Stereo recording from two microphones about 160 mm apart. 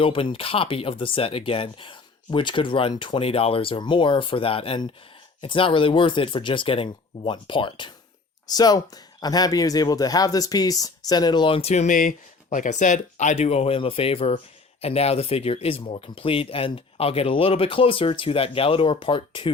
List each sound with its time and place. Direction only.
0.0 s speech: 35° left (ahead or behind)